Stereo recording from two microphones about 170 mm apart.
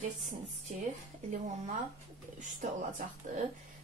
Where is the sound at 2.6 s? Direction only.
45° right (ahead or behind).